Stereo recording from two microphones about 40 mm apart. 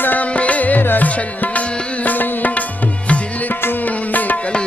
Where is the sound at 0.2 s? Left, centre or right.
Left.